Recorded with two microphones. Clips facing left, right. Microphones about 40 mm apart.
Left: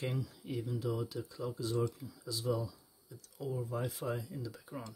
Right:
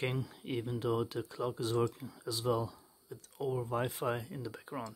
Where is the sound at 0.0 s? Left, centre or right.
Right.